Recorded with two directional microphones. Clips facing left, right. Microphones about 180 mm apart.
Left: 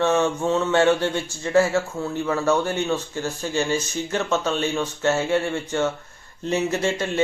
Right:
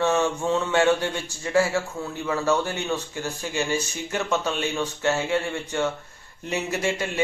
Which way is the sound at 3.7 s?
15° right (ahead or behind).